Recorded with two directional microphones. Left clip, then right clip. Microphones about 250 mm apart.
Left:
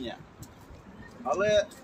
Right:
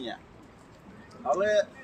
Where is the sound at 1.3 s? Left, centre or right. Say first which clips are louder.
Even; centre.